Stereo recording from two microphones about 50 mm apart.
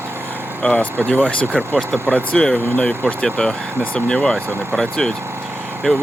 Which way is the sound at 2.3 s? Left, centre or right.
Left.